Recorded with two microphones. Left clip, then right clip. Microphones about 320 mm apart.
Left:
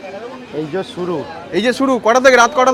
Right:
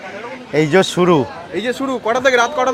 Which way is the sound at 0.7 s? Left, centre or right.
Right.